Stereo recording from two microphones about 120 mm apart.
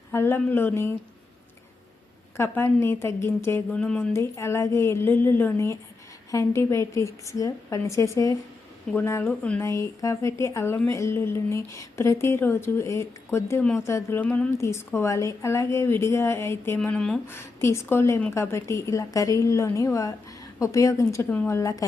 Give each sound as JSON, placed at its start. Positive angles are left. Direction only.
{"t": 0.1, "sound": "speech", "side_deg": 20}
{"t": 2.3, "sound": "speech", "side_deg": 20}
{"t": 4.1, "sound": "speech", "side_deg": 25}
{"t": 8.9, "sound": "speech", "side_deg": 5}
{"t": 9.6, "sound": "speech", "side_deg": 25}
{"t": 14.6, "sound": "speech", "side_deg": 25}